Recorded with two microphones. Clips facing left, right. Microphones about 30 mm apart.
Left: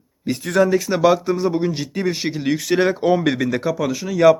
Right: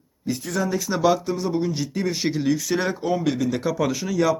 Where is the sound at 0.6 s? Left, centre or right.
Left.